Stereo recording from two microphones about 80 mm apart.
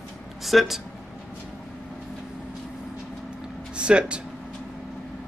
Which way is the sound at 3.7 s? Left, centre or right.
Centre.